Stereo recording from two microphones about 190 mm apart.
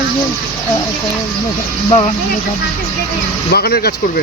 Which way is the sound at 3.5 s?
55° left (ahead or behind).